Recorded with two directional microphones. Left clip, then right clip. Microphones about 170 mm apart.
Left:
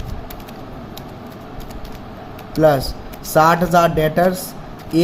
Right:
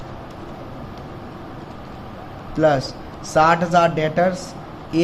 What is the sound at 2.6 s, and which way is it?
Speech, 55° left (ahead or behind).